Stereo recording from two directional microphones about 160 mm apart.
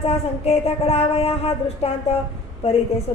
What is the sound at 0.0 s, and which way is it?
A woman's voice, 40° left (ahead or behind).